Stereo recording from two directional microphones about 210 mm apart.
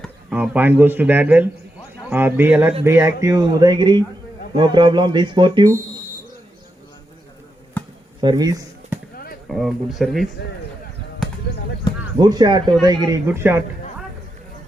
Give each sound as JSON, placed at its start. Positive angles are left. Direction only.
{"t": 0.3, "sound": "speech", "side_deg": -5}
{"t": 7.8, "sound": "chop", "side_deg": 5}
{"t": 8.2, "sound": "speech", "side_deg": -20}
{"t": 9.5, "sound": "speech", "side_deg": 0}
{"t": 12.2, "sound": "speech", "side_deg": -20}